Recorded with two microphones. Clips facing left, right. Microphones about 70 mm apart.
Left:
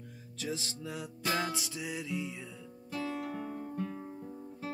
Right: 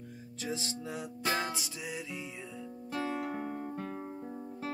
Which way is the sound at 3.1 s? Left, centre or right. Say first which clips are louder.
Right 2 dB; right.